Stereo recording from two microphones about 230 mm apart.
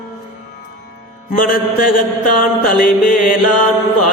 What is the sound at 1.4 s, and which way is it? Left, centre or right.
Speech, left.